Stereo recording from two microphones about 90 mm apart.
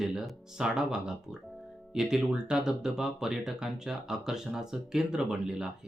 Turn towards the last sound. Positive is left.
turn(degrees=-10)  # may be behind; listen again after turning